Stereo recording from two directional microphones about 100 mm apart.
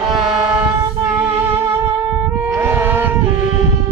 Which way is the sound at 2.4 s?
20° right (ahead or behind).